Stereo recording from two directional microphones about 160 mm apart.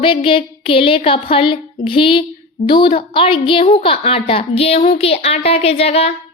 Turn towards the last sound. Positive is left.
turn(degrees=40)  # may be behind; listen again after turning